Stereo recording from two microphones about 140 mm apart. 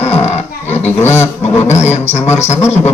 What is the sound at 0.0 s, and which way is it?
Roaring cats, 50° left (ahead or behind).